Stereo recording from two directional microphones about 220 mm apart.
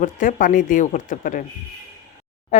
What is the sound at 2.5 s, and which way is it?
Speech, 35° left (ahead or behind).